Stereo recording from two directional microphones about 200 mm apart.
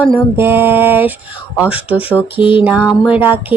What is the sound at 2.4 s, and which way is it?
Mantra, 25° left (ahead or behind).